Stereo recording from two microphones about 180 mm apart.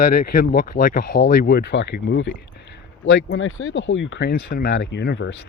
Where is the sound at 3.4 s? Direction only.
90° left.